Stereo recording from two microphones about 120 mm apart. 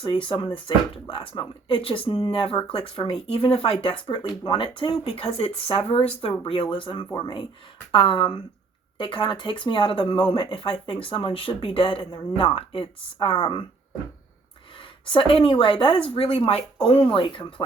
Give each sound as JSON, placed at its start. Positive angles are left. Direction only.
{"t": 0.0, "sound": "speech", "side_deg": 45}
{"t": 14.8, "sound": "speech", "side_deg": 45}